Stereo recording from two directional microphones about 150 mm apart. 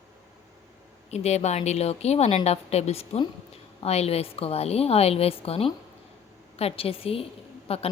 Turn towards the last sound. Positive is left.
turn(degrees=40)  # may be behind; listen again after turning